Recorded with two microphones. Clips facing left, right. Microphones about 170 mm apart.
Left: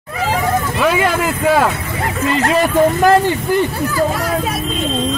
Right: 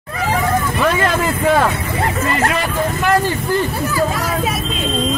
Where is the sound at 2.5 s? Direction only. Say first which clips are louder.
Left 7 dB; 35° left (ahead or behind).